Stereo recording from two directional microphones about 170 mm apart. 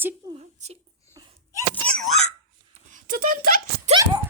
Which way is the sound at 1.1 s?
25° right (ahead or behind).